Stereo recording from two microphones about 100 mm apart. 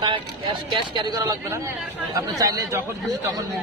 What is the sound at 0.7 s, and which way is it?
Speech, 50° right (ahead or behind).